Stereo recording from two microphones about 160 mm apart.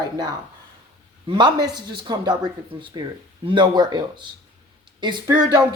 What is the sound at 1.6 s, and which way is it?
Speech, 25° right (ahead or behind).